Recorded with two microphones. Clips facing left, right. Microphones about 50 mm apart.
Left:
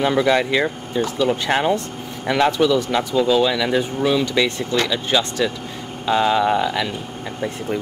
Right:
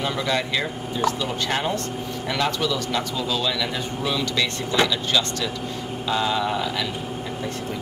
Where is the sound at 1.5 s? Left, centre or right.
Left.